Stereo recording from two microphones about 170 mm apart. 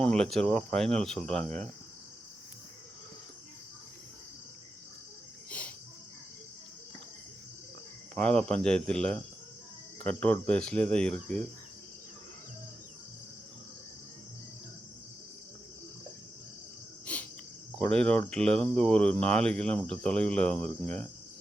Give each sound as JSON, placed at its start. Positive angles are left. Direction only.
{"t": 0.0, "sound": "speech", "side_deg": 5}
{"t": 5.5, "sound": "cricket", "side_deg": 10}
{"t": 8.1, "sound": "speech", "side_deg": 5}
{"t": 17.7, "sound": "speech", "side_deg": 5}